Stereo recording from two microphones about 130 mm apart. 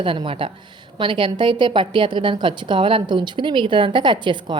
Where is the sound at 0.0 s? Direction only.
45° right (ahead or behind).